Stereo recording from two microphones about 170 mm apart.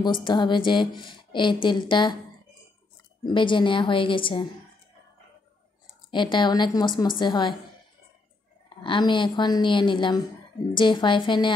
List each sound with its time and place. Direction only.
0.0 s a woman's voice: 30° left (ahead or behind)
3.3 s a woman's voice: 30° left (ahead or behind)
6.0 s a woman's voice: 30° left (ahead or behind)
8.6 s a woman's voice: 30° left (ahead or behind)